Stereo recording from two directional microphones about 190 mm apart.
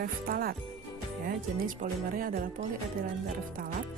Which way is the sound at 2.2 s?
50° right (ahead or behind).